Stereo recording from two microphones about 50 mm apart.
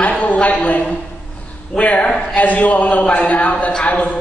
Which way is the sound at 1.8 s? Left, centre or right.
Left.